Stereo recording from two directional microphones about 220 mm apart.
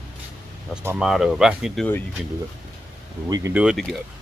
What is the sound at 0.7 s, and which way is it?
Speech, 5° right (ahead or behind).